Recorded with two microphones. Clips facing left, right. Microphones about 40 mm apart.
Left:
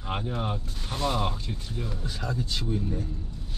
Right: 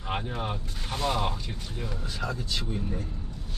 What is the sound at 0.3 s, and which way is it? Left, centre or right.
Speech, centre.